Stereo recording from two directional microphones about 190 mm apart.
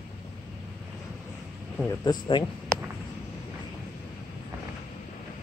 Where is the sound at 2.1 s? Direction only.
25° left (ahead or behind).